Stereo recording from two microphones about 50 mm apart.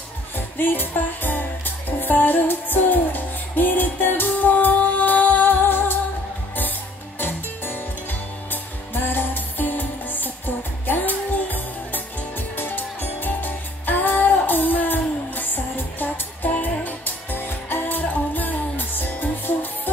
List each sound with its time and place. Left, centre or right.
0.6 s music: left
7.2 s music: left